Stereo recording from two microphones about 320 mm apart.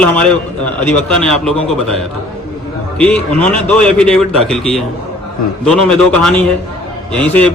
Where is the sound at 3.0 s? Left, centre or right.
Centre.